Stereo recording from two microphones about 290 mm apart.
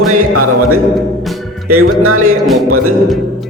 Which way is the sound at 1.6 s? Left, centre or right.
Right.